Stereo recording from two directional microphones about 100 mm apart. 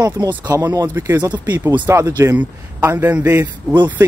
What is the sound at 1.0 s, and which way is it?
Speech, 25° right (ahead or behind).